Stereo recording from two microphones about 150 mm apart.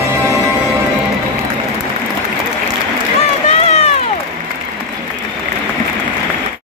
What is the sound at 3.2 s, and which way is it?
Run, 45° left (ahead or behind).